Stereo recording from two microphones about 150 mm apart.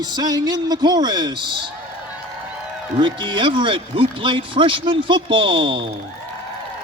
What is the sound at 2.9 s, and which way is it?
Speech, 30° right (ahead or behind).